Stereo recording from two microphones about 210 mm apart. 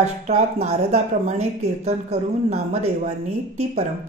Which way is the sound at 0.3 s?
30° right (ahead or behind).